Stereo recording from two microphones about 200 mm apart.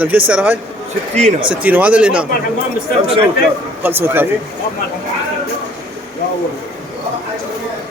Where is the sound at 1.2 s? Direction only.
35° right (ahead or behind).